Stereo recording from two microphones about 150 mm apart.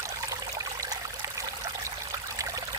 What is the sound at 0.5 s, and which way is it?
Water, 25° right (ahead or behind).